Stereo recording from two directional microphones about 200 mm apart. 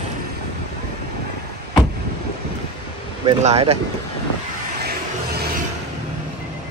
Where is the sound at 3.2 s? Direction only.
30° right (ahead or behind).